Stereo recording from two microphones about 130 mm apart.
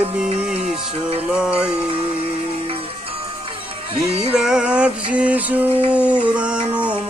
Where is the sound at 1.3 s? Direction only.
5° right (ahead or behind).